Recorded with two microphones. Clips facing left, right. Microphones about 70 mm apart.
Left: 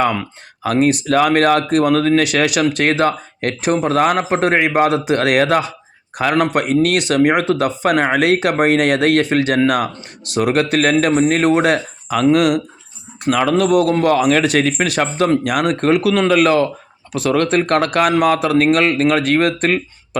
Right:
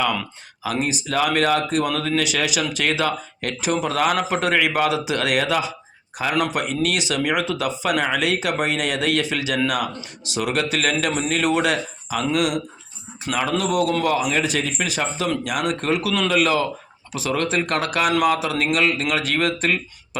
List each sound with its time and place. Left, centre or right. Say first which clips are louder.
0.6 s speech: left 9 dB; left
14.0 s speech: left 7 dB; left